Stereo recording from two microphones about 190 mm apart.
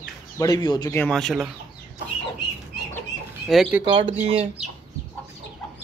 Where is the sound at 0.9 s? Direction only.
5° left (ahead or behind).